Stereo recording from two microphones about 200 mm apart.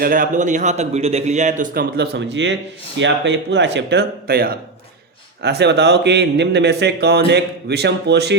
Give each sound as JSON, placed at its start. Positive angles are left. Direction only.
{"t": 0.0, "sound": "speech", "side_deg": -45}